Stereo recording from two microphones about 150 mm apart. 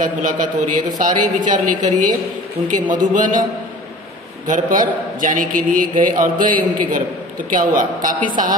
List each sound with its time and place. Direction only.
0.0 s a man's voice: 65° right (ahead or behind)
4.5 s a man's voice: 65° right (ahead or behind)